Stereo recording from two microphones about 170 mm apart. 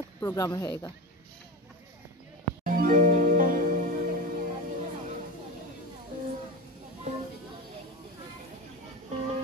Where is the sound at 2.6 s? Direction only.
55° right (ahead or behind).